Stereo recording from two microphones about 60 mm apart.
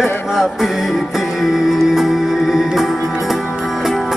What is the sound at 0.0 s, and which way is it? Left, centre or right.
Music, centre.